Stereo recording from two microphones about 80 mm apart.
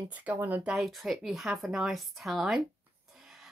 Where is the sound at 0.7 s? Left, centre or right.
Centre.